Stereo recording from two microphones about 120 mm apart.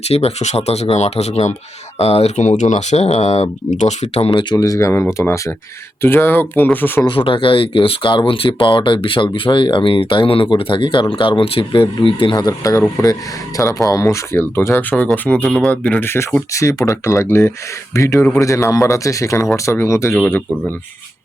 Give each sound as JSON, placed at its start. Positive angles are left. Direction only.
{"t": 0.1, "sound": "speech", "side_deg": 60}
{"t": 4.3, "sound": "speech", "side_deg": 30}
{"t": 7.0, "sound": "speech", "side_deg": 45}